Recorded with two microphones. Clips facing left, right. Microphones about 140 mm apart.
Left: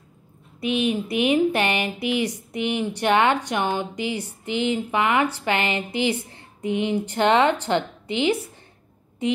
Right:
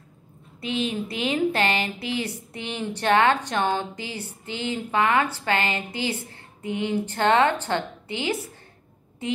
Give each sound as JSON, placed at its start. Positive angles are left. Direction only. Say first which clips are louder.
{"t": 0.6, "sound": "speech", "louder": "left 4 dB", "side_deg": 15}